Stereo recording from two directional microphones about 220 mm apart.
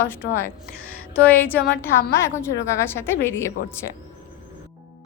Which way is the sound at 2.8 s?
10° left (ahead or behind).